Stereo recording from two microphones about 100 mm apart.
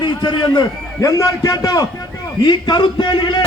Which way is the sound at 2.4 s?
50° left (ahead or behind).